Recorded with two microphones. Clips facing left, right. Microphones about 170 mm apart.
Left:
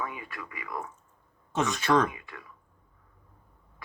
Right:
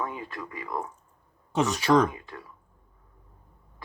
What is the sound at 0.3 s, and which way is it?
Speech, 35° right (ahead or behind).